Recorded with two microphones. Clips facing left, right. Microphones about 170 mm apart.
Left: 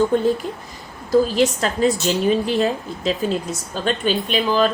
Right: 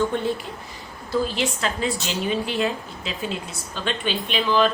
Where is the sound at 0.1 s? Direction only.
40° left (ahead or behind).